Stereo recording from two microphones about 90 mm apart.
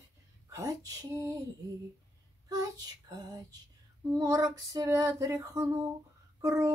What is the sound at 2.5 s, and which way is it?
Child singing, 45° right (ahead or behind).